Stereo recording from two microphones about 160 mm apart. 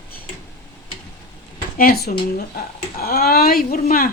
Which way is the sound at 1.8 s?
70° left (ahead or behind).